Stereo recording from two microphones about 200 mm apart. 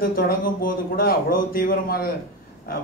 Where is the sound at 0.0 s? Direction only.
45° left (ahead or behind).